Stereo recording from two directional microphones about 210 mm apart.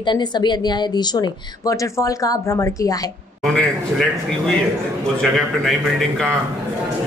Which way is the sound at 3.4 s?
Centre (ahead or behind).